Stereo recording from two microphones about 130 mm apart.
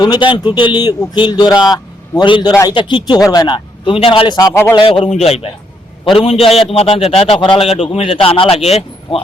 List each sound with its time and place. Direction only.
0.0 s a man's voice: 35° left (ahead or behind)
5.0 s a man's voice: 55° left (ahead or behind)